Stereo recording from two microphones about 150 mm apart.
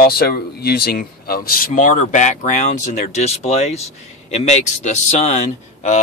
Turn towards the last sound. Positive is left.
turn(degrees=50)  # may be behind; listen again after turning